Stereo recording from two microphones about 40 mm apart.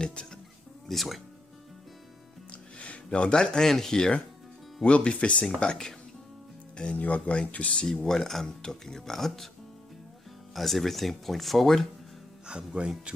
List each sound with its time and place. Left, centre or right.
0.0 s speech: left
0.8 s speech: centre
2.5 s speech: left; by 4.1 s centre
4.8 s speech: left
5.4 s speech: centre
7.0 s speech: left
7.8 s speech: centre
10.5 s speech: centre
12.4 s speech: right